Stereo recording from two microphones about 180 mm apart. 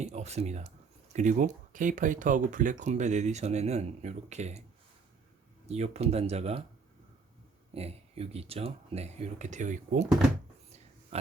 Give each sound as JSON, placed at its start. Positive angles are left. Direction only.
{"t": 0.0, "sound": "speech", "side_deg": -35}
{"t": 5.6, "sound": "speech", "side_deg": -35}
{"t": 7.7, "sound": "speech", "side_deg": -35}
{"t": 11.1, "sound": "oink", "side_deg": -35}